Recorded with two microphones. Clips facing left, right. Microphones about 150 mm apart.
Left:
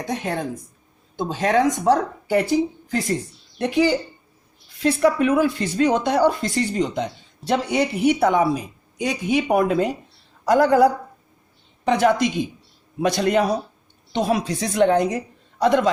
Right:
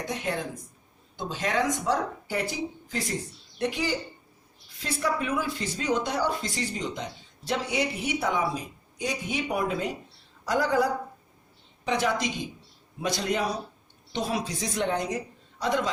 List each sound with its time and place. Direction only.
1.1 s speech: 55° left (ahead or behind)